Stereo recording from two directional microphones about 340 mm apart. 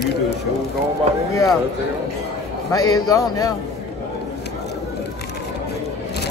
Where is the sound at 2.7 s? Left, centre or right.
Centre.